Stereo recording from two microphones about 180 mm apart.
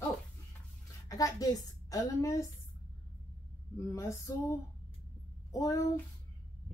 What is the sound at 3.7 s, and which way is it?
Female singing, 15° left (ahead or behind).